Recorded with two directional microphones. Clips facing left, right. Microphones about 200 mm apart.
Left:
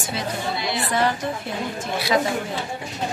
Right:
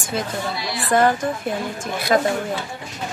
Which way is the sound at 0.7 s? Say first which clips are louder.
Right 7 dB; 50° right (ahead or behind).